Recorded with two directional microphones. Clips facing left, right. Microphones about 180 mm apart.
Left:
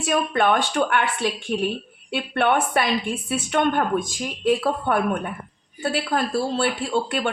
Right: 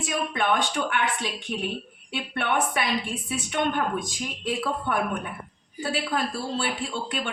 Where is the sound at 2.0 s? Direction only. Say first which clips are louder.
Left 7 dB; 60° left (ahead or behind).